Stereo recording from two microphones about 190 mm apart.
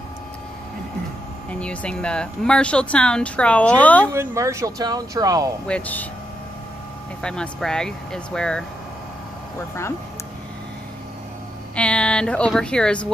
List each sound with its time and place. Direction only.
1.5 s speech: 5° left (ahead or behind)
4.1 s speech: 15° right (ahead or behind)
5.7 s speech: 10° left (ahead or behind)
7.2 s speech: 5° left (ahead or behind)
11.7 s speech: 5° left (ahead or behind)